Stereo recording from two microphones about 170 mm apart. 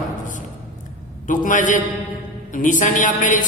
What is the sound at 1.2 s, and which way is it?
A woman's voice, 50° left (ahead or behind).